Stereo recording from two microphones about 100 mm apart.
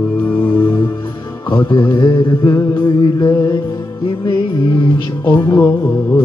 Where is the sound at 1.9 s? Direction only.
50° left (ahead or behind).